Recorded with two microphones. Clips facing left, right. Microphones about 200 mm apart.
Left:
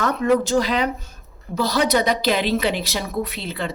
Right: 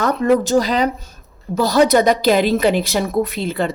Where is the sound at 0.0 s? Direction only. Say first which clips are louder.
Right 3 dB; 40° right (ahead or behind).